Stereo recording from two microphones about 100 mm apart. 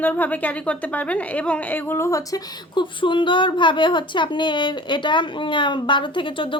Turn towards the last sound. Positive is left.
turn(degrees=55)  # may be behind; listen again after turning